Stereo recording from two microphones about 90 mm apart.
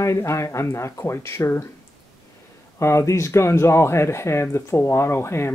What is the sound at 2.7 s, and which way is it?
Speech, 30° left (ahead or behind).